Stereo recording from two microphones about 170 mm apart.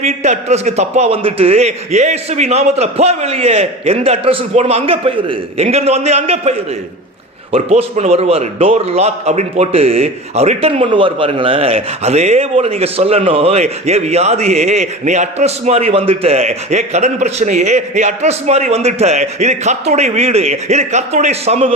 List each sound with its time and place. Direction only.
0.0 s a man's voice: 40° right (ahead or behind)
7.5 s a man's voice: 35° right (ahead or behind)